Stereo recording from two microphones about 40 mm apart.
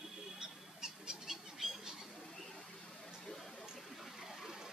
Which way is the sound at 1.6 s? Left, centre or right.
Centre.